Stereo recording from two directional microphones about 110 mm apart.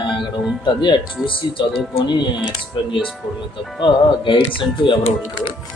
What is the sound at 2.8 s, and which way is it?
Speech, 50° left (ahead or behind).